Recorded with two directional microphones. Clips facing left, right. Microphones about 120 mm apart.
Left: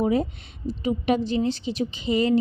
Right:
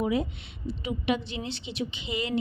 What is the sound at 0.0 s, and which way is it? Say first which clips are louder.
A woman's voice: left 5 dB; 40° left (ahead or behind).